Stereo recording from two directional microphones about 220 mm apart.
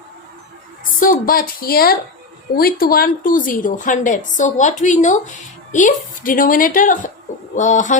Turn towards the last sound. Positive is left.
turn(degrees=35)  # may be behind; listen again after turning